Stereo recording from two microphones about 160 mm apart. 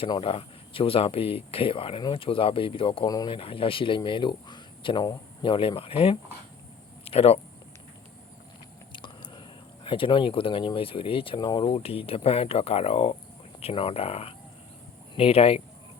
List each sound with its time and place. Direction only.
0.0 s speech: 35° left (ahead or behind)
7.0 s a sound: 40° left (ahead or behind)
8.9 s biting: 30° left (ahead or behind)
9.8 s speech: 35° left (ahead or behind)